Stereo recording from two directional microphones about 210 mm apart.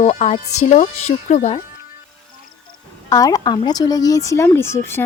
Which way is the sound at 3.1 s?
15° left (ahead or behind).